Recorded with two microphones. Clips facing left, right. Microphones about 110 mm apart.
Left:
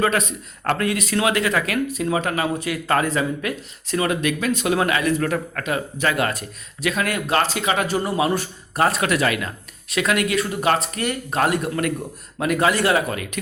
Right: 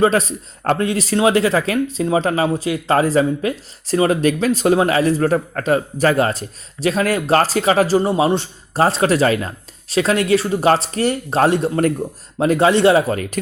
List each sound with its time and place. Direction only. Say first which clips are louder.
0.0 s a man's voice: right 5 dB; 30° right (ahead or behind)